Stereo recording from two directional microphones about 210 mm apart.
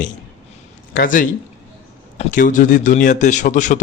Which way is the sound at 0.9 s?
40° left (ahead or behind).